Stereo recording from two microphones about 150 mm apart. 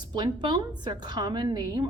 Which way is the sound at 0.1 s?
30° right (ahead or behind).